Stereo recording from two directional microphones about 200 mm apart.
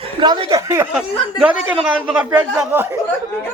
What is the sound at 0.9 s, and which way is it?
Speech, 5° right (ahead or behind).